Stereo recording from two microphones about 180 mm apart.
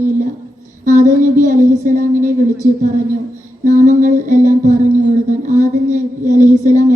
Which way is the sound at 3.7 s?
45° right (ahead or behind).